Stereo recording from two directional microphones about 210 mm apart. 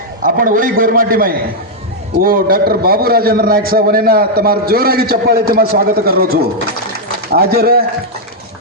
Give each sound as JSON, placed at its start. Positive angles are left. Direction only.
{"t": 0.2, "sound": "a man's voice", "side_deg": -40}